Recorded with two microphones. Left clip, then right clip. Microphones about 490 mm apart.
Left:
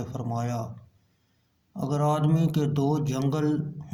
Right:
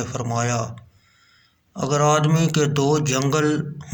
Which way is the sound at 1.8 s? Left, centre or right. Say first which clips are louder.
Right 8 dB; left.